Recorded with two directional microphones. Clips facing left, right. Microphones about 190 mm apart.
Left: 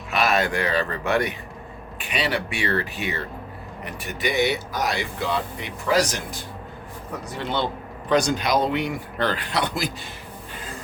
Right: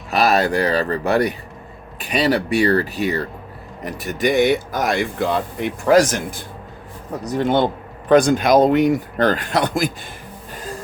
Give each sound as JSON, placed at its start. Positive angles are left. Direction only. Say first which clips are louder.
{"t": 0.1, "sound": "speech", "louder": "right 5 dB", "side_deg": -35}
{"t": 7.3, "sound": "speech", "louder": "right 9 dB", "side_deg": -45}